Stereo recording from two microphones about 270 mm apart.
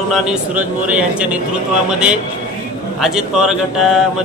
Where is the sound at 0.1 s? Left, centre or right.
Centre.